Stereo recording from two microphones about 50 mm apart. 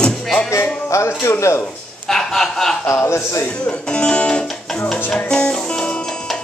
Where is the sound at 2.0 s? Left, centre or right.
Centre.